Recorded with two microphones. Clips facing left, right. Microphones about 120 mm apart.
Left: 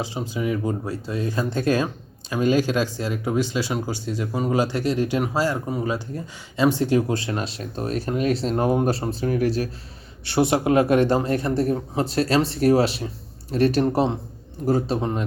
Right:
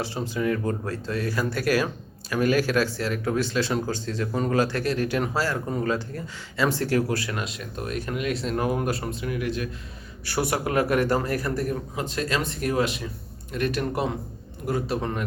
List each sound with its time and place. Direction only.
0.0 s speech: 15° left (ahead or behind); by 9.6 s 40° left (ahead or behind)
10.2 s a man's voice: 25° left (ahead or behind)